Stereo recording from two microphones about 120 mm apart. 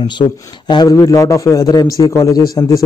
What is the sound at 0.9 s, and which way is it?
A man's voice, 30° left (ahead or behind).